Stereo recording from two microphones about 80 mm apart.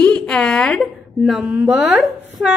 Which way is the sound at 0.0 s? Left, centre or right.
Centre.